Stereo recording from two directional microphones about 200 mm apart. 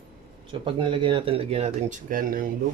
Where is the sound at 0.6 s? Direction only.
25° right (ahead or behind); by 2.5 s 45° right (ahead or behind).